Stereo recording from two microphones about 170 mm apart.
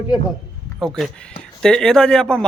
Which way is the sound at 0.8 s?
Centre (ahead or behind).